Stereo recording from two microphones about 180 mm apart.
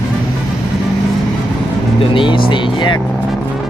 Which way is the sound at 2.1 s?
25° left (ahead or behind).